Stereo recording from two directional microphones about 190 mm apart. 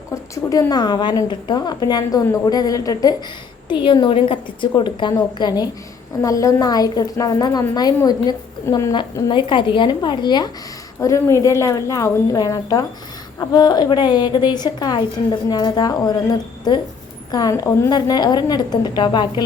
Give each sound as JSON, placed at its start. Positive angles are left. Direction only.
{"t": 0.1, "sound": "a woman's voice", "side_deg": 20}